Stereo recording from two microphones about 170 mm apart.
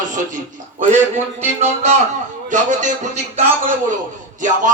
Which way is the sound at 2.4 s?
45° right (ahead or behind).